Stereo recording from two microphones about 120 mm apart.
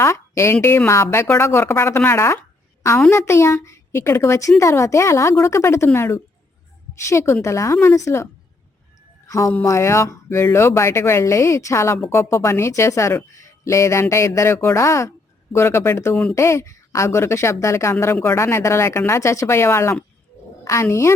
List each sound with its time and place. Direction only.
0.0 s a woman's voice: 25° left (ahead or behind)